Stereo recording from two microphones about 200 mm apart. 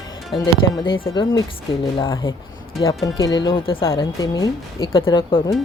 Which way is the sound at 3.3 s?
25° left (ahead or behind).